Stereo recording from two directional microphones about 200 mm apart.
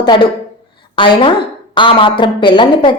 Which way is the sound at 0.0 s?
25° left (ahead or behind).